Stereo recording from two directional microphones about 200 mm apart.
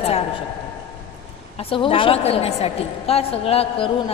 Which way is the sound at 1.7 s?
25° left (ahead or behind).